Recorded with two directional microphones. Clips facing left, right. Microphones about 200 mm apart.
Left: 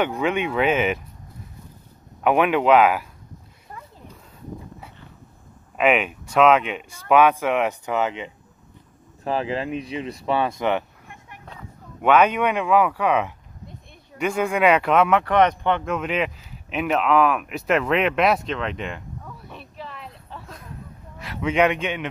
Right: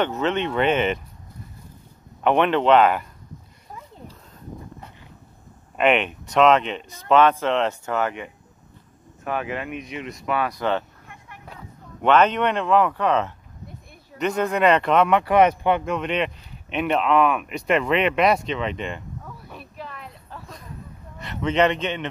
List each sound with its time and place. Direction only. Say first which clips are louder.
0.0 s speech: even; 10° left (ahead or behind)
2.2 s speech: even; 5° left (ahead or behind)
5.8 s speech: even; 5° left (ahead or behind)
9.2 s speech: left 3 dB; 30° left (ahead or behind)
12.0 s a man's voice: even; 10° left (ahead or behind)